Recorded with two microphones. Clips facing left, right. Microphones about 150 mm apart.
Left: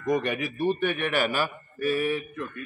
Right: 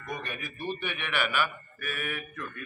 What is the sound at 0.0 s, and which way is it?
A man's voice, 90° left.